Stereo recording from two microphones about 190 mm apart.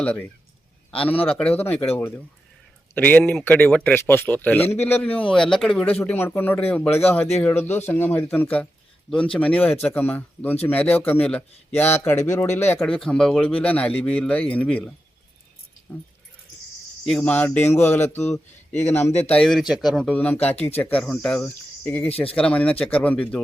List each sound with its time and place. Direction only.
0.0 s speech: 10° left (ahead or behind)
17.1 s speech: 5° left (ahead or behind)
22.1 s speech: 30° left (ahead or behind)
22.4 s speech: 5° left (ahead or behind)